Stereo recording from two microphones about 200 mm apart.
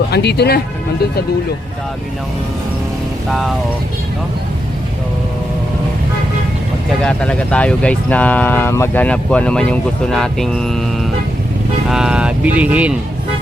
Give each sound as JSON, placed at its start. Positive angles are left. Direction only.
{"t": 0.1, "sound": "speech", "side_deg": 55}
{"t": 3.2, "sound": "speech", "side_deg": 0}
{"t": 7.0, "sound": "speech", "side_deg": 5}